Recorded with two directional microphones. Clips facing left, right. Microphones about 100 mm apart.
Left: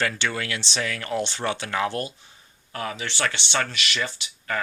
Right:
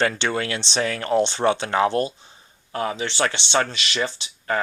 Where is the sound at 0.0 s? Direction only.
25° right (ahead or behind).